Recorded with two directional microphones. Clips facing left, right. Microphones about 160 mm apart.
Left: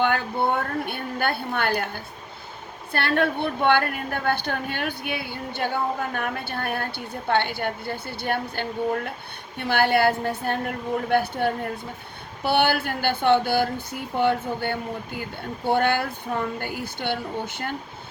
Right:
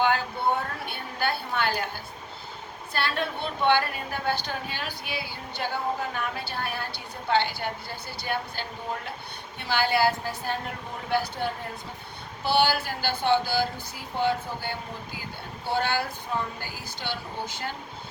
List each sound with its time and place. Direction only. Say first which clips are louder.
0.0 s a woman's voice: left 2 dB; 55° left (ahead or behind)
2.9 s speech: left 6 dB; 60° left (ahead or behind)